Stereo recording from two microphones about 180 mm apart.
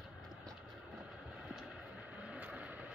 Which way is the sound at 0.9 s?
5° right (ahead or behind).